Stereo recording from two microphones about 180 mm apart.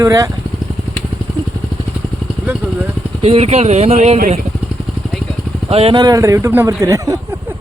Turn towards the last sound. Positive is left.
turn(degrees=-20)  # may be behind; listen again after turning